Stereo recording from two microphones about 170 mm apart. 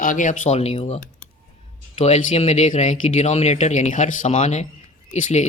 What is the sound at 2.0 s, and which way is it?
Speech, 40° left (ahead or behind).